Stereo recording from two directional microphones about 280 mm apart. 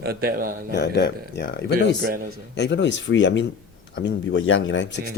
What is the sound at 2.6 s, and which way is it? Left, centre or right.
A man's voice, left.